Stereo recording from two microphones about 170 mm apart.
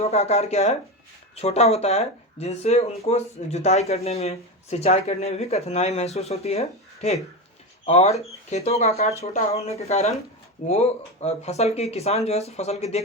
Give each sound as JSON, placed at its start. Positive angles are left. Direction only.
{"t": 0.0, "sound": "speech", "side_deg": 40}